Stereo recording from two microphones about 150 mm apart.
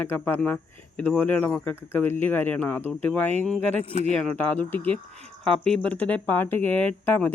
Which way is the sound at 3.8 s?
50° left (ahead or behind).